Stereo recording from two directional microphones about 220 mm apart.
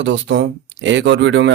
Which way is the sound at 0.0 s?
55° right (ahead or behind).